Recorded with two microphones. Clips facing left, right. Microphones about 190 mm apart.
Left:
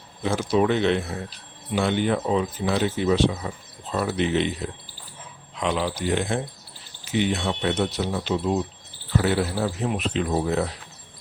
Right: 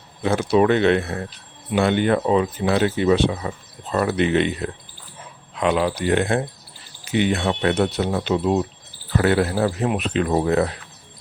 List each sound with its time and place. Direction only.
0.2 s speech: 60° right (ahead or behind)